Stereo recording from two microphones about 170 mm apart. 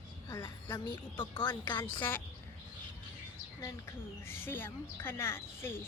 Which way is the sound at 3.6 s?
15° left (ahead or behind).